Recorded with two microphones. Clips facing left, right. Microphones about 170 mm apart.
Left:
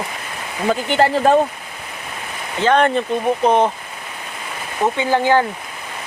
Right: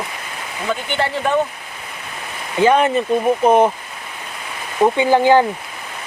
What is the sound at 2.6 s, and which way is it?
Speech, 10° right (ahead or behind).